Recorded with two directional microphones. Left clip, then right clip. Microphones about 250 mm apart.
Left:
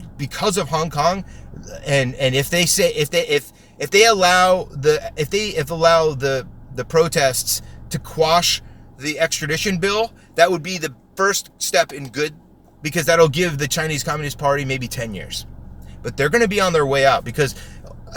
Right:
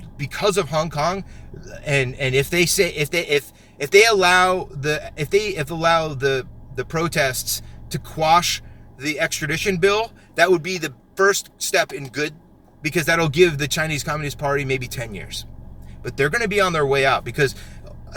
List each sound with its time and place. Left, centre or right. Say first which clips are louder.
0.2 s a man's voice: right 1 dB; centre